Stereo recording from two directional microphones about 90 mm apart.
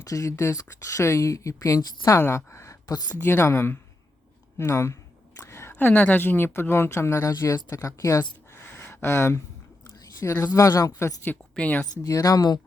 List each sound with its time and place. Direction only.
0.0 s a woman's voice: 40° left (ahead or behind)
2.8 s speech: 45° left (ahead or behind)
3.2 s speech: 25° left (ahead or behind)
5.4 s a sound: 30° left (ahead or behind)
5.7 s speech: 20° left (ahead or behind); by 8.2 s 35° left (ahead or behind)
8.5 s a sound: 30° left (ahead or behind)
10.2 s speech: 30° left (ahead or behind)
11.5 s speech: 15° left (ahead or behind)
12.0 s speech: 40° left (ahead or behind)